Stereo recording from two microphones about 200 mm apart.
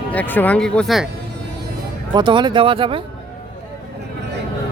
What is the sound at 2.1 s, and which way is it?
Speech, 25° right (ahead or behind).